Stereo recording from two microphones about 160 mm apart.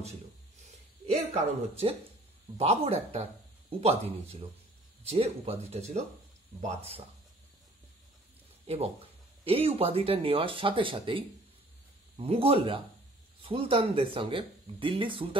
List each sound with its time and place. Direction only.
1.3 s speech: 40° right (ahead or behind)
8.6 s speech: 40° right (ahead or behind)